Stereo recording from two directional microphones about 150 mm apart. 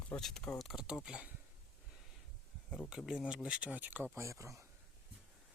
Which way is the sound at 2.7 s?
5° left (ahead or behind).